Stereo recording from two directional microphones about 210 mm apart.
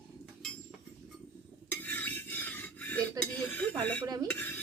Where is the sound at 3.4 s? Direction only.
5° left (ahead or behind).